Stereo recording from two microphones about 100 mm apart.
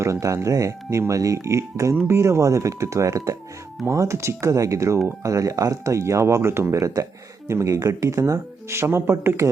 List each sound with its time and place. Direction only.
0.0 s speech: 30° right (ahead or behind)